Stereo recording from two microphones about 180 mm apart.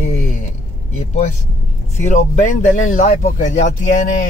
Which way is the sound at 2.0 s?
45° left (ahead or behind).